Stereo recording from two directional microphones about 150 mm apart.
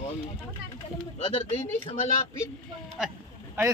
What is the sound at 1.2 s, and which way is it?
Speech, 40° left (ahead or behind).